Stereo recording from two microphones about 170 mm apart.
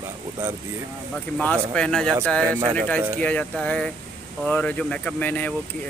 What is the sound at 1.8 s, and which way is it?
Speech, 5° left (ahead or behind).